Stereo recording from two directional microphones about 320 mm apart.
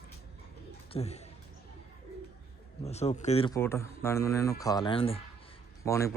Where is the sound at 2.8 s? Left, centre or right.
Centre.